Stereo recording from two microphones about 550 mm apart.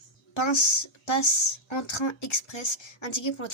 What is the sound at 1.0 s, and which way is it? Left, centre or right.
Speech, left.